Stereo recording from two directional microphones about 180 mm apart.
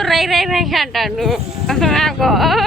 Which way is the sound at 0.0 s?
Centre (ahead or behind).